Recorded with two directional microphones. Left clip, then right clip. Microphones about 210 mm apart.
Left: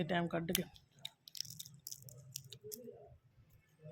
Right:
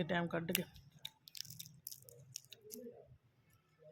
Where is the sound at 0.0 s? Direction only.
Centre (ahead or behind).